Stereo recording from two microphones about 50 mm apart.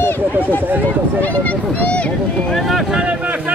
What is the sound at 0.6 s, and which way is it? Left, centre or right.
Speech, right.